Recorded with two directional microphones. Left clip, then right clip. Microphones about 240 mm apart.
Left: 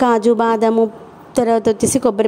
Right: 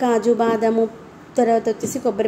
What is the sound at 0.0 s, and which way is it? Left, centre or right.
A woman's voice, left.